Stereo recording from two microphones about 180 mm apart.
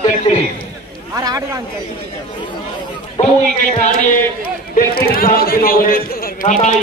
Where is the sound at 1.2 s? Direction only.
20° right (ahead or behind).